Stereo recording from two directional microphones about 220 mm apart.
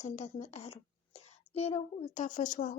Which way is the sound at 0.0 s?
30° left (ahead or behind).